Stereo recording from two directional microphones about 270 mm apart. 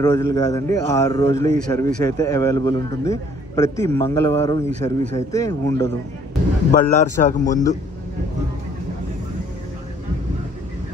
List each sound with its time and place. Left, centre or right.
0.0 s a man's voice: centre
6.7 s a man's voice: left